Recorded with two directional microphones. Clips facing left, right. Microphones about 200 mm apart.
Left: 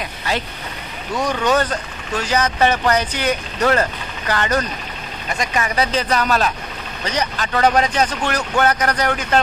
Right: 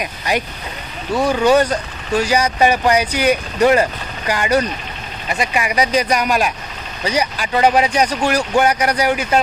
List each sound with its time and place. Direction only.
0.0 s speech: 15° right (ahead or behind)